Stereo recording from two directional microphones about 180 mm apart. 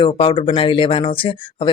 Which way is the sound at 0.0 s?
30° left (ahead or behind).